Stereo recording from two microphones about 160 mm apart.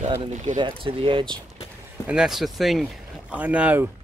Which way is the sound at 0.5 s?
30° right (ahead or behind).